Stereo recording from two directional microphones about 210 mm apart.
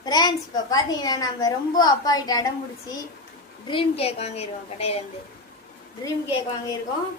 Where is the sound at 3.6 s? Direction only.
25° left (ahead or behind).